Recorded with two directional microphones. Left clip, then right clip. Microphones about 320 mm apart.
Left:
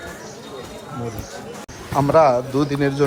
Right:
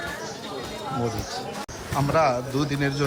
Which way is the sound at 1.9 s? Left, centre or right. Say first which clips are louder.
Left 7 dB; centre.